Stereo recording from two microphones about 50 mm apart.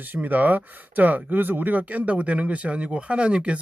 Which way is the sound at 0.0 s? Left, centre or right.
Right.